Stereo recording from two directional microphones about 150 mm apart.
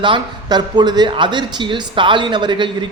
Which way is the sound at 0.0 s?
30° right (ahead or behind).